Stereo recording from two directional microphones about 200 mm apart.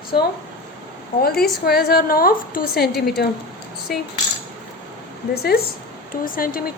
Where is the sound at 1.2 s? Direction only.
50° left (ahead or behind).